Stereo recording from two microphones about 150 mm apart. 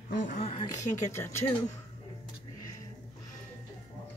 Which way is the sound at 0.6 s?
20° left (ahead or behind).